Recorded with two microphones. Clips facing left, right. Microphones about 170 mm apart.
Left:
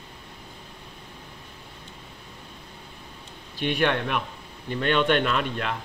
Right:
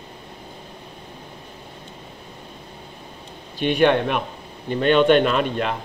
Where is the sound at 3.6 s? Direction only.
25° right (ahead or behind).